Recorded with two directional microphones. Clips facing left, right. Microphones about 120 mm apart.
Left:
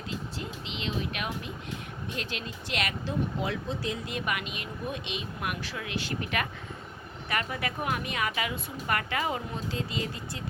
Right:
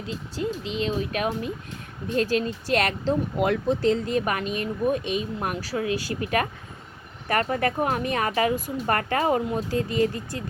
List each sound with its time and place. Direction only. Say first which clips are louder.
0.3 s speech: right 10 dB; 40° right (ahead or behind)
3.1 s speech: right 8 dB; 65° right (ahead or behind)
4.1 s speech: right 8 dB; 40° right (ahead or behind)